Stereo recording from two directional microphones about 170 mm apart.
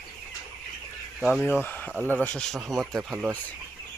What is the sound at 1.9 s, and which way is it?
Speech, 10° right (ahead or behind).